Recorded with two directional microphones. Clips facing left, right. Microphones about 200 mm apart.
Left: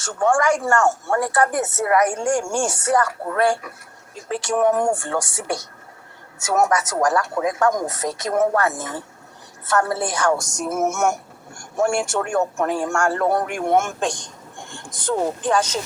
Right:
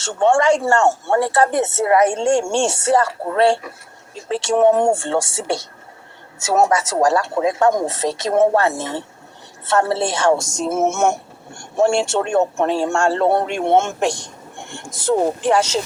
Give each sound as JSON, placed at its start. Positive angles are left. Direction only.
{"t": 0.0, "sound": "speech", "side_deg": -25}